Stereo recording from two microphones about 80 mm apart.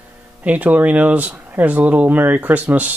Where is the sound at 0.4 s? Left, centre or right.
Centre.